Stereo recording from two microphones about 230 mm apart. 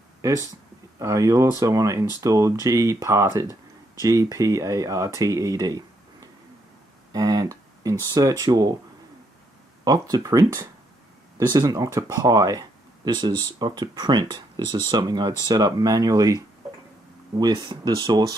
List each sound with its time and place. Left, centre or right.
0.9 s speech: centre
7.1 s speech: centre
9.8 s speech: centre
17.4 s speech: centre